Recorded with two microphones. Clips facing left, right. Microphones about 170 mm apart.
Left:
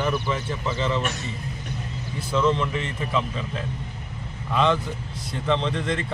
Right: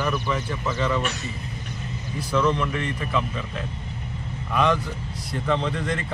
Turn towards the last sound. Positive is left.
turn(degrees=-5)  # may be behind; listen again after turning